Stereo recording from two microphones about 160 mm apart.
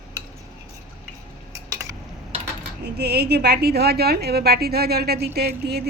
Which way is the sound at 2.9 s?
85° right.